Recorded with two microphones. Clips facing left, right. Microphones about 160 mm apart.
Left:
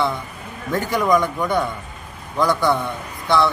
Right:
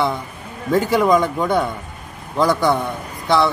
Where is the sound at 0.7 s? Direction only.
20° right (ahead or behind).